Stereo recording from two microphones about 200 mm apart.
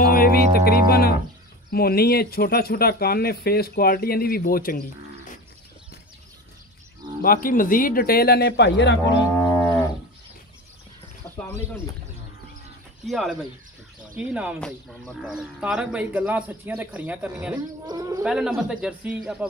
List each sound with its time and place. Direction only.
0.0 s music: 45° left (ahead or behind)
1.7 s speech: 50° left (ahead or behind)
7.2 s speech: 45° left (ahead or behind)
9.4 s livestock: 10° left (ahead or behind)
11.3 s bird: 10° left (ahead or behind)
13.0 s a man's voice: centre (ahead or behind)
17.6 s speech: 20° right (ahead or behind)
18.2 s a man's voice: 5° right (ahead or behind)